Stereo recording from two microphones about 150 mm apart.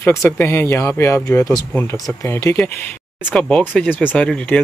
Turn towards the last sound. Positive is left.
turn(degrees=10)  # may be behind; listen again after turning